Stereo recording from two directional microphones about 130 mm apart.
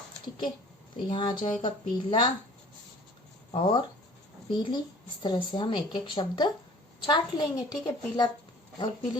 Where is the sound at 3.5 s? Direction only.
45° left (ahead or behind).